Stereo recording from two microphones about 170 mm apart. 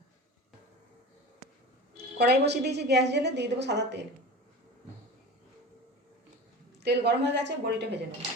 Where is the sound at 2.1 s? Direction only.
75° right (ahead or behind).